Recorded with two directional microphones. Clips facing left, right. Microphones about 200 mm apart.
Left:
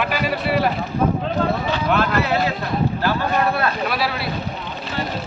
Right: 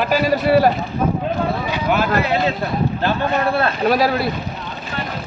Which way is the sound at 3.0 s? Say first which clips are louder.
Right 2 dB; 30° right (ahead or behind).